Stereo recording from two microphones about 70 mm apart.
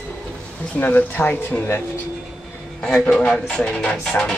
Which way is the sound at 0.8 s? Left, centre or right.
Left.